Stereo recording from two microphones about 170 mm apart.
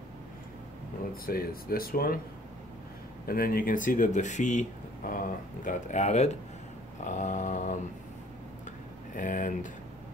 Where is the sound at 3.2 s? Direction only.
60° left (ahead or behind).